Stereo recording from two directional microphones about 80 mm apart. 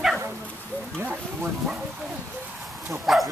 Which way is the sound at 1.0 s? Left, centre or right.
Right.